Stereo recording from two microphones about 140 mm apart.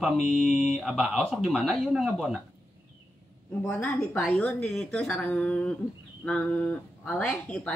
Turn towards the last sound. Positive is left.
turn(degrees=10)  # may be behind; listen again after turning